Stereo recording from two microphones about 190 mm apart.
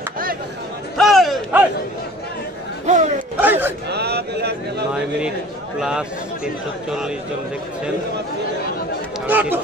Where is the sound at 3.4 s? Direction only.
10° right (ahead or behind).